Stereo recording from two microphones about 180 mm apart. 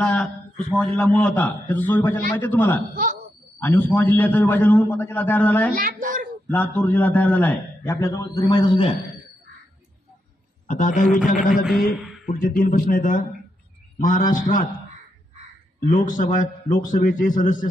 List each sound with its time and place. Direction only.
0.0 s a man's voice: 5° left (ahead or behind)
5.8 s a woman's voice: 50° right (ahead or behind)
6.5 s a man's voice: 10° left (ahead or behind); by 8.9 s 30° left (ahead or behind)
10.7 s a man's voice: 45° left (ahead or behind)
11.9 s speech: centre (ahead or behind)
12.3 s a man's voice: 50° left (ahead or behind)
15.9 s a man's voice: 50° left (ahead or behind)